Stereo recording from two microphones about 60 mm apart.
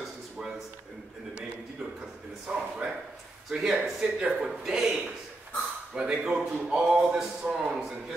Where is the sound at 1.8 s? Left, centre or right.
Centre.